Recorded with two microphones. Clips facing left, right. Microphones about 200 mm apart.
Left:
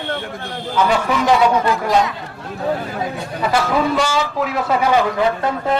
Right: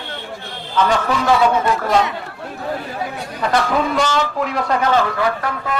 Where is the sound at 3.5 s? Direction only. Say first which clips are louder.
Even; 5° left (ahead or behind).